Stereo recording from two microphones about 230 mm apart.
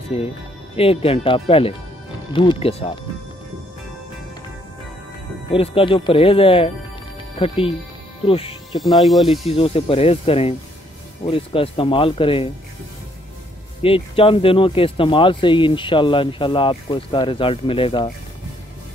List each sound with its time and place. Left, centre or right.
0.1 s speech: left
5.5 s speech: left
8.7 s speech: centre
9.5 s speech: left
13.8 s speech: left